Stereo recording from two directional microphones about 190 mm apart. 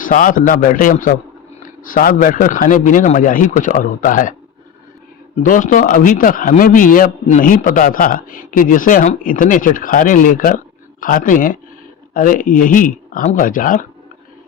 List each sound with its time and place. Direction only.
0.0 s a man's voice: 45° left (ahead or behind)
5.4 s a man's voice: 45° left (ahead or behind)